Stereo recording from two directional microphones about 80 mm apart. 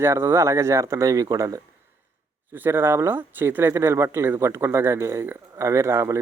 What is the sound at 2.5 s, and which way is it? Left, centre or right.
Speech, right.